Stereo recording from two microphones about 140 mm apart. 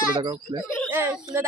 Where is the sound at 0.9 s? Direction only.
15° right (ahead or behind).